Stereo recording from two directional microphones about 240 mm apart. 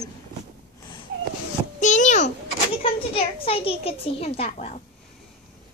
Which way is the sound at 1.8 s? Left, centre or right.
Left.